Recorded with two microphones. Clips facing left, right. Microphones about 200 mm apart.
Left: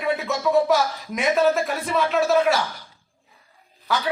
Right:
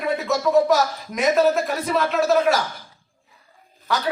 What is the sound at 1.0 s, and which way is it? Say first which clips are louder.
A man's voice: right 2 dB; centre (ahead or behind).